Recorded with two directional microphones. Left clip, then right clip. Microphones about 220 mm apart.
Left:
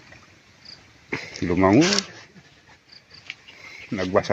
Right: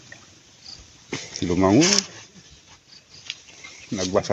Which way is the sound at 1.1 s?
5° right (ahead or behind).